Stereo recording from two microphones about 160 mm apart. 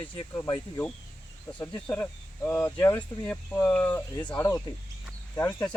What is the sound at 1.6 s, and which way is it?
Speech, 10° left (ahead or behind).